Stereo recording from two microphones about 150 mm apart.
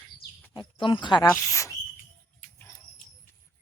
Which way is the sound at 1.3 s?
20° left (ahead or behind).